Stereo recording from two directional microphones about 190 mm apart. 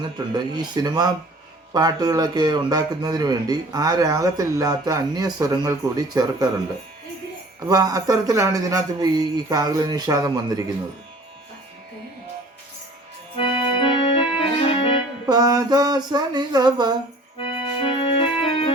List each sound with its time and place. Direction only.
0.0 s speech: 20° right (ahead or behind)
7.7 s speech: 20° right (ahead or behind)
13.7 s organ: 25° left (ahead or behind)
14.3 s music: 30° left (ahead or behind)
15.3 s speech: 20° right (ahead or behind)
17.8 s organ: 25° left (ahead or behind)